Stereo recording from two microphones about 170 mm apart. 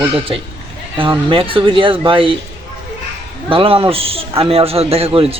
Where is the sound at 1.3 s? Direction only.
30° right (ahead or behind).